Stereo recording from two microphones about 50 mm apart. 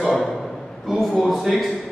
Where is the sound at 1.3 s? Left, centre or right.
Centre.